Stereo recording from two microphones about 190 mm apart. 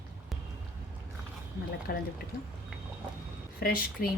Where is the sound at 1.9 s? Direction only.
50° left (ahead or behind).